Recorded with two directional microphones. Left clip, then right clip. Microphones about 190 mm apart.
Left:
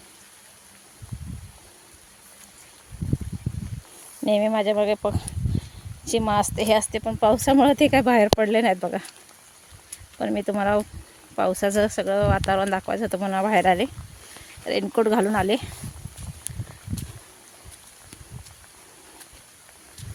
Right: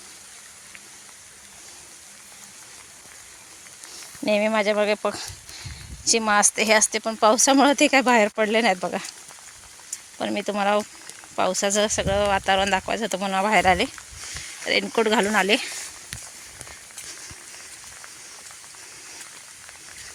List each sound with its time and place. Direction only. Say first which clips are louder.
4.3 s a woman's voice: even; 20° left (ahead or behind)
10.2 s a woman's voice: even; 30° left (ahead or behind)